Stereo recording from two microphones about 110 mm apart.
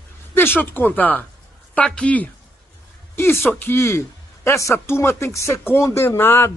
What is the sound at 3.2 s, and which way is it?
A man's voice, 20° left (ahead or behind).